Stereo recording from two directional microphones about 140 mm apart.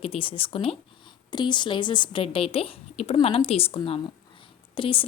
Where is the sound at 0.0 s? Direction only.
40° left (ahead or behind).